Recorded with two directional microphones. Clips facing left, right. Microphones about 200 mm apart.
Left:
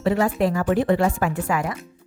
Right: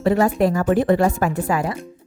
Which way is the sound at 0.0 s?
45° right (ahead or behind).